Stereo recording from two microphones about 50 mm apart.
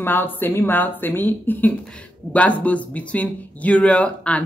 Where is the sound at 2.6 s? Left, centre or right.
Left.